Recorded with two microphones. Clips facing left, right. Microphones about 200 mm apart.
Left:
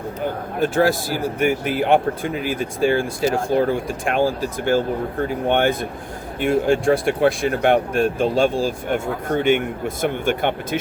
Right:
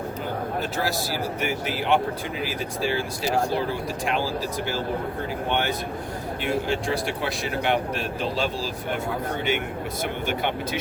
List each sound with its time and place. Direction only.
0.6 s speech: 50° left (ahead or behind)